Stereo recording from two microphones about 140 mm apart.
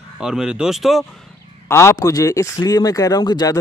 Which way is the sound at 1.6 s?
20° left (ahead or behind).